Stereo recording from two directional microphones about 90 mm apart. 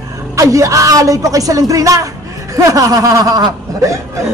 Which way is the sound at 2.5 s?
40° right (ahead or behind).